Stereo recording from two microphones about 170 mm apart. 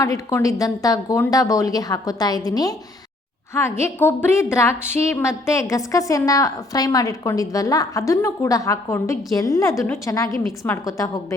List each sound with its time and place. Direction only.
0.0 s a woman's voice: 20° left (ahead or behind)